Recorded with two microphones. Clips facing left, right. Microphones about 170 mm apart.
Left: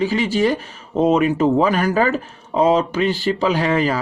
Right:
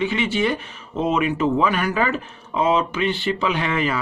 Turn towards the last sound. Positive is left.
turn(degrees=35)  # may be behind; listen again after turning